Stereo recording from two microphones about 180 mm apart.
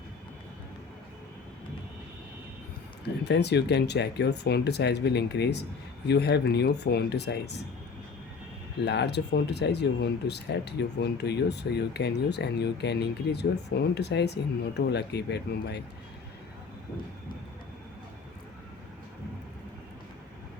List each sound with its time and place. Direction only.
3.2 s speech: 70° left (ahead or behind)
8.8 s speech: 70° left (ahead or behind)